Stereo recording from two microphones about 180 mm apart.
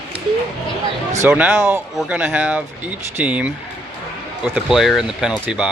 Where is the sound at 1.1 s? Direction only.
10° right (ahead or behind).